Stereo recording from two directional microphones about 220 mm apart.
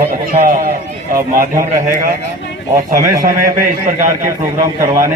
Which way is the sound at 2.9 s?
40° right (ahead or behind).